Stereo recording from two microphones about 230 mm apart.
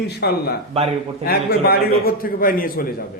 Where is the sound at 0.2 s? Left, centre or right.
Left.